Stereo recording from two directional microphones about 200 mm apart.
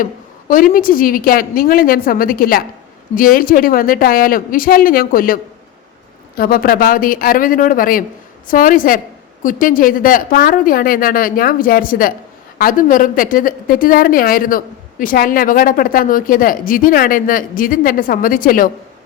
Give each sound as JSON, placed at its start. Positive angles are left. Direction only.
{"t": 0.0, "sound": "a woman's voice", "side_deg": 40}